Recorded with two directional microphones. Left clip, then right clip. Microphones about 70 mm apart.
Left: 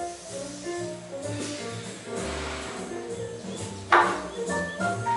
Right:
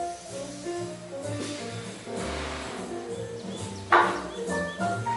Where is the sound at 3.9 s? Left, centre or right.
Centre.